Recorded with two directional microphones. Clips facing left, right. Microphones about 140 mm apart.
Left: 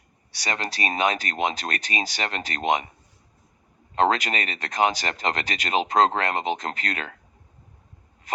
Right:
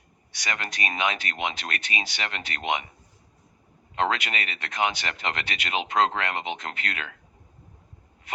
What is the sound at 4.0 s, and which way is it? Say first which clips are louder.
Speech: left 5 dB; 40° left (ahead or behind).